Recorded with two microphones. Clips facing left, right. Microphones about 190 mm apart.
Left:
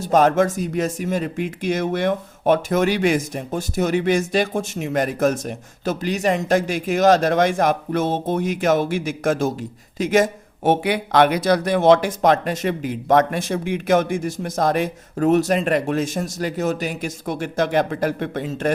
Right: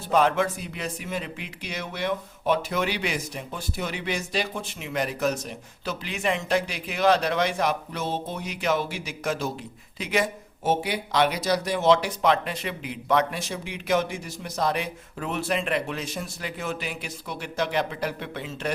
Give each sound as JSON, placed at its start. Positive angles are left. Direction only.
{"t": 0.0, "sound": "speech", "side_deg": 45}
{"t": 10.6, "sound": "speech", "side_deg": 60}